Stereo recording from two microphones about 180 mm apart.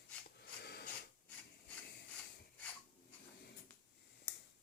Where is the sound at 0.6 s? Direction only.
65° left (ahead or behind).